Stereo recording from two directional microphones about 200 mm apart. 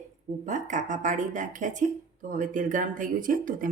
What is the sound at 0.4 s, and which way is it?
Speech, 40° right (ahead or behind).